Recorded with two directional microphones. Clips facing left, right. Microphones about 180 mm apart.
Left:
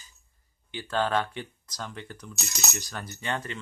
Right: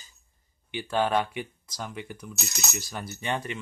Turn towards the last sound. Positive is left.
turn(degrees=-15)  # may be behind; listen again after turning